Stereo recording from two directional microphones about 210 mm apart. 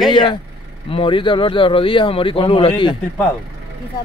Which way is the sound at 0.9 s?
25° left (ahead or behind).